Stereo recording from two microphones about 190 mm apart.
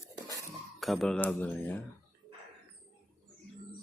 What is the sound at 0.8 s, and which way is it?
Speech, centre (ahead or behind).